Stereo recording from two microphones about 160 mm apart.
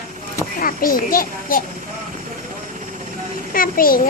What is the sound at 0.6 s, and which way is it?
A child's voice, 60° left (ahead or behind).